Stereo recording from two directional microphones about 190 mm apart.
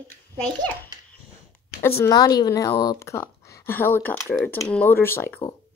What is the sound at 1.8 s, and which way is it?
Speech, 15° left (ahead or behind).